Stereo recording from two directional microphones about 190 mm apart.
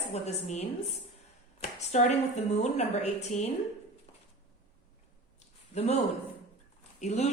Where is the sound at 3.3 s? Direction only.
40° left (ahead or behind).